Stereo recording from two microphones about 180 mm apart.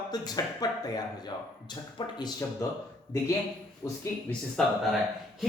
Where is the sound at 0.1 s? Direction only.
20° left (ahead or behind).